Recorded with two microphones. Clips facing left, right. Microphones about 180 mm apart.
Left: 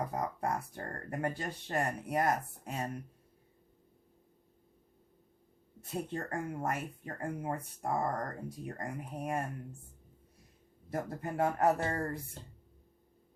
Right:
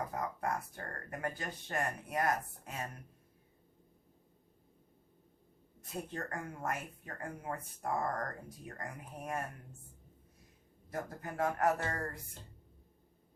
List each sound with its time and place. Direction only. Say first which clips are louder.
0.1 s speech: left 2 dB; 30° left (ahead or behind)
6.1 s speech: left 5 dB; 30° left (ahead or behind)
10.8 s speech: left 4 dB; 30° left (ahead or behind)